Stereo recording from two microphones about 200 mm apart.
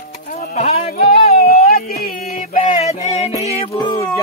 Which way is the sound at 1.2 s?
50° left (ahead or behind).